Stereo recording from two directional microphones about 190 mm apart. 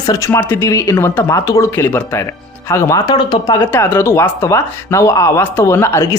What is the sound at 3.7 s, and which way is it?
A man's voice, 10° left (ahead or behind).